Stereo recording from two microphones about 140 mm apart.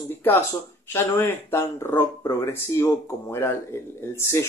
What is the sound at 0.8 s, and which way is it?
Speech, 15° left (ahead or behind).